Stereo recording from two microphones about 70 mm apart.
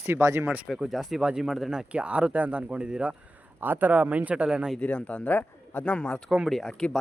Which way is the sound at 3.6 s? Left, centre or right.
Right.